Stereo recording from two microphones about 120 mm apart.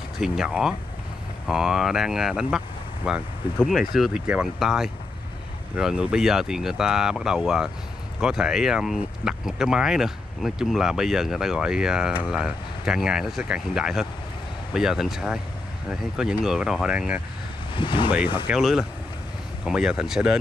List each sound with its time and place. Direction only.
0.2 s speech: 5° right (ahead or behind)
17.7 s speech: 40° left (ahead or behind)
18.5 s speech: 5° right (ahead or behind)